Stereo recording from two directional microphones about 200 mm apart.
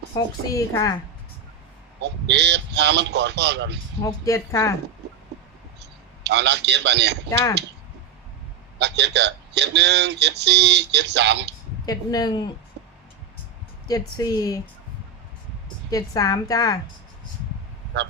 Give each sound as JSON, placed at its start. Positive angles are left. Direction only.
{"t": 0.1, "sound": "a woman's voice", "side_deg": 15}
{"t": 2.0, "sound": "speech", "side_deg": -60}
{"t": 4.0, "sound": "a woman's voice", "side_deg": 15}
{"t": 6.2, "sound": "speech", "side_deg": -60}
{"t": 8.8, "sound": "speech", "side_deg": -60}
{"t": 11.9, "sound": "a woman's voice", "side_deg": 20}
{"t": 12.8, "sound": "a sound", "side_deg": -55}
{"t": 14.2, "sound": "a woman's voice", "side_deg": 20}
{"t": 15.9, "sound": "a woman's voice", "side_deg": 20}